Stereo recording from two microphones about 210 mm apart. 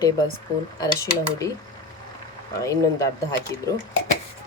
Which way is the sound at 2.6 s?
15° left (ahead or behind).